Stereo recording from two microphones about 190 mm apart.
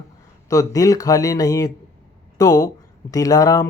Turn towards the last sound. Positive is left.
turn(degrees=20)  # may be behind; listen again after turning